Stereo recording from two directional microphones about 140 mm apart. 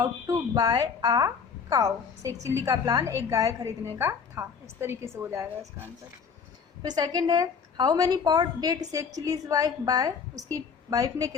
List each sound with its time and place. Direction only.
0.0 s a woman's voice: 25° right (ahead or behind)
6.8 s a woman's voice: 30° right (ahead or behind)